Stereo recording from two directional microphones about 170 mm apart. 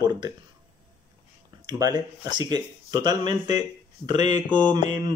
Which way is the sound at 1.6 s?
25° right (ahead or behind).